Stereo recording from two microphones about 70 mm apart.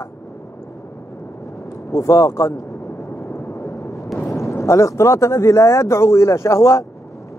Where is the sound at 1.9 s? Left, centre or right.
Left.